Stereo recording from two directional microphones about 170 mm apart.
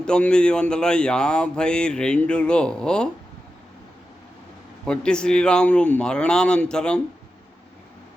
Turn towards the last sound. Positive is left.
turn(degrees=5)  # may be behind; listen again after turning